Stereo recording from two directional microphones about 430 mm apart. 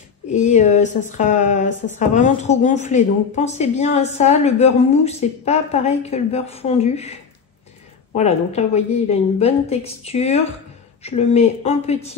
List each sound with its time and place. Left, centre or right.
0.3 s a woman's voice: centre